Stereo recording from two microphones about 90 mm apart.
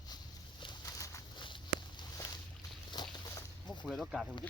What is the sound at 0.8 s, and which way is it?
Pigeon, 35° left (ahead or behind).